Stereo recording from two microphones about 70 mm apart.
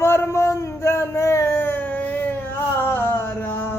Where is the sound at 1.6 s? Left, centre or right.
Left.